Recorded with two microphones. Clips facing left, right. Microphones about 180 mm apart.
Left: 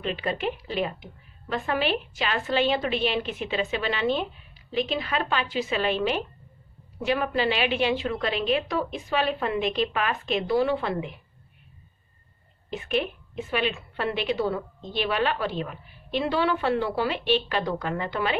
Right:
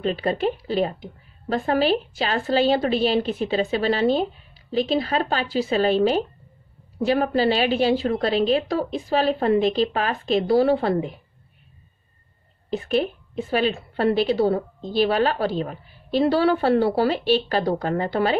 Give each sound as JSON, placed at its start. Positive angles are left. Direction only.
{"t": 0.0, "sound": "a woman's voice", "side_deg": -40}
{"t": 12.6, "sound": "a woman's voice", "side_deg": -35}